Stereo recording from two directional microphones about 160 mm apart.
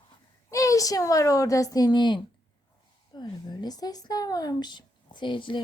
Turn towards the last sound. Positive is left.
turn(degrees=30)  # may be behind; listen again after turning